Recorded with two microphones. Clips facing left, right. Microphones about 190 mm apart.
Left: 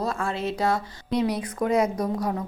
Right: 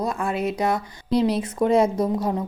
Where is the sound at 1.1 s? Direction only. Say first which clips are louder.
Right 4 dB; 30° right (ahead or behind).